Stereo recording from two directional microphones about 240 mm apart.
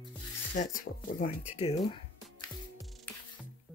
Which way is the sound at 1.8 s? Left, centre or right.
Centre.